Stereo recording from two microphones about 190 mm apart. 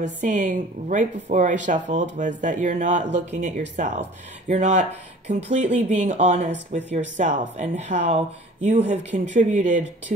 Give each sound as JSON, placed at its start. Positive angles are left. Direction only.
{"t": 0.0, "sound": "a woman's voice", "side_deg": -40}